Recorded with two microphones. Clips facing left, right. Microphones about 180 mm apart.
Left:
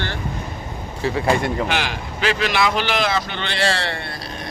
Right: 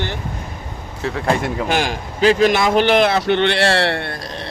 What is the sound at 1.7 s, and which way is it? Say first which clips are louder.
A man's voice: right 4 dB; 45° right (ahead or behind).